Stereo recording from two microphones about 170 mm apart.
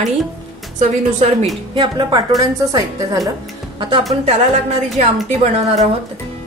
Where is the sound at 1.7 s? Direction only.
25° right (ahead or behind).